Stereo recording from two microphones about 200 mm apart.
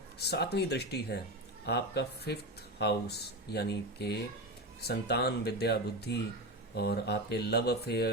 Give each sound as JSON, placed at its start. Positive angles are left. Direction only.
{"t": 0.2, "sound": "speech", "side_deg": 55}